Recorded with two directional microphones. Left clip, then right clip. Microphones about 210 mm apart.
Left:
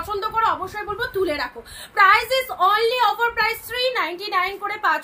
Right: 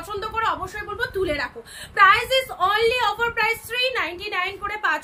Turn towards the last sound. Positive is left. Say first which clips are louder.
# left 2 dB
turn(degrees=-10)  # may be behind; listen again after turning